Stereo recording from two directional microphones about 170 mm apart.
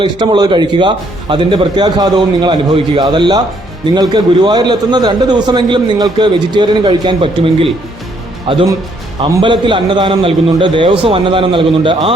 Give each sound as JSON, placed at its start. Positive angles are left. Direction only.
{"t": 0.0, "sound": "a man's voice", "side_deg": -25}